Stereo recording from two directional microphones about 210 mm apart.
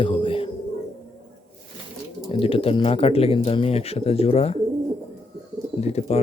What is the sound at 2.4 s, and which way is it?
Speech, 25° left (ahead or behind).